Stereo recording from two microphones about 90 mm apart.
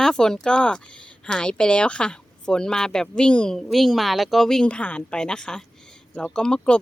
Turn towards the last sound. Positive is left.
turn(degrees=10)  # may be behind; listen again after turning